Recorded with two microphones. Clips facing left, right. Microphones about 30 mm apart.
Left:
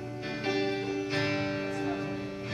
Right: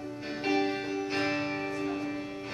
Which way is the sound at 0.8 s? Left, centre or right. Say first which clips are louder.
Even; centre.